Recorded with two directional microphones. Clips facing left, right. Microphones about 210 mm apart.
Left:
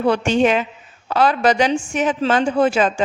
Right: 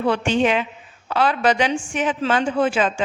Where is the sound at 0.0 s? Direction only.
40° left (ahead or behind).